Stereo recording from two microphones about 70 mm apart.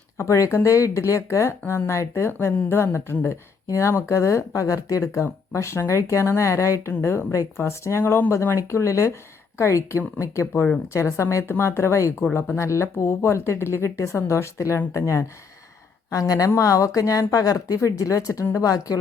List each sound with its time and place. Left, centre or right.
0.2 s speech: left
2.8 s speech: left
16.0 s a woman's voice: left